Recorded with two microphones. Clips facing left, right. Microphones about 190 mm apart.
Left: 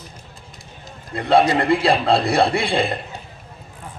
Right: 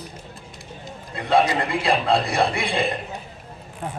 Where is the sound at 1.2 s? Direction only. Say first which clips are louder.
Left 4 dB; 30° left (ahead or behind).